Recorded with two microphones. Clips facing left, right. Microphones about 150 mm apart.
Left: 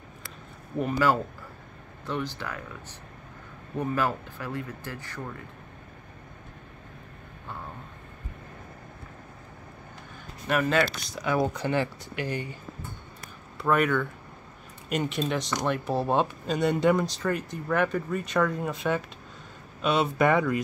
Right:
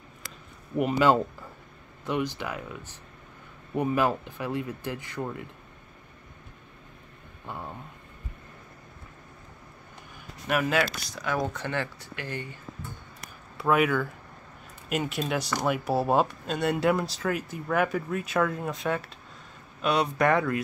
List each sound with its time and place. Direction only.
0.7 s speech: 15° right (ahead or behind)
10.5 s speech: 5° right (ahead or behind)
11.5 s speech: 15° left (ahead or behind)
13.6 s speech: 5° right (ahead or behind)